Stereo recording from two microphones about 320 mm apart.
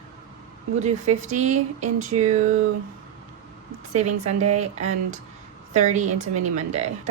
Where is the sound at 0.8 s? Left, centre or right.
Right.